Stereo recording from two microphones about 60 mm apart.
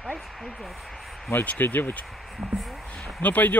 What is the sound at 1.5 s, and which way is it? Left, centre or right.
Speech, left.